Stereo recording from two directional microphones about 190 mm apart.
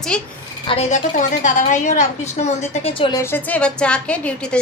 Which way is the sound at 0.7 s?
35° left (ahead or behind).